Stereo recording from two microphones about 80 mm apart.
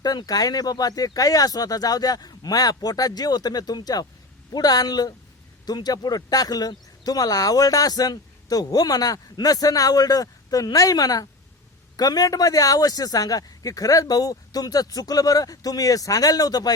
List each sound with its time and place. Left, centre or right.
0.0 s speech: left